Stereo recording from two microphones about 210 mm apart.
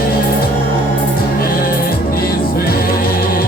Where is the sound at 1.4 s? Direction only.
45° left (ahead or behind).